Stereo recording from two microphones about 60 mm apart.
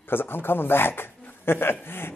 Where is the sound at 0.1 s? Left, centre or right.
Left.